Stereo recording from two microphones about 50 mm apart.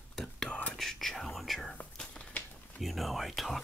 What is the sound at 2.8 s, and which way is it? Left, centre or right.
Speech, centre.